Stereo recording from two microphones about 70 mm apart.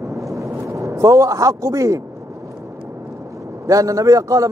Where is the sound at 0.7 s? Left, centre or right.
Right.